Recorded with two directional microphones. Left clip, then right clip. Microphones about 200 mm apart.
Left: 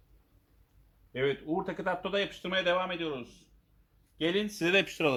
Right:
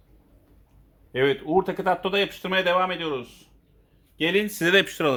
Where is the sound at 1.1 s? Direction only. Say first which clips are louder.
Right 9 dB; 25° right (ahead or behind).